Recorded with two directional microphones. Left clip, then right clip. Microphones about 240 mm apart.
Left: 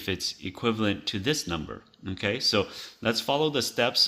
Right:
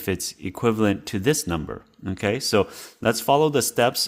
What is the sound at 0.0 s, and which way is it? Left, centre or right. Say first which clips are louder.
Speech: right 3 dB; right.